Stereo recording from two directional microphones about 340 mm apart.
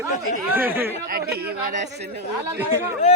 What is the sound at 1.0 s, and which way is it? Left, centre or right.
Speech, right.